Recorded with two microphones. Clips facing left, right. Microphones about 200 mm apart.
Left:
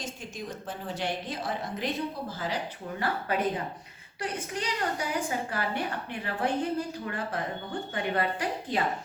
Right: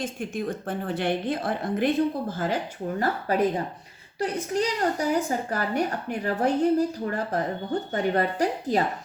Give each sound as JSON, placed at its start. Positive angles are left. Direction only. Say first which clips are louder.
{"t": 0.0, "sound": "a woman's voice", "louder": "right 9 dB", "side_deg": -55}
{"t": 3.0, "sound": "a woman's voice", "louder": "right 5 dB", "side_deg": -35}